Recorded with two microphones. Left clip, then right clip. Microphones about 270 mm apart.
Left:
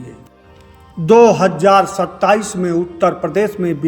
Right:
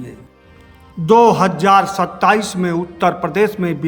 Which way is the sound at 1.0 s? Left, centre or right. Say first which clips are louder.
Left 2 dB; centre.